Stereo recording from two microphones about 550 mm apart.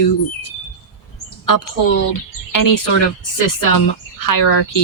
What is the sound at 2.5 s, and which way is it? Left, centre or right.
Speech, left.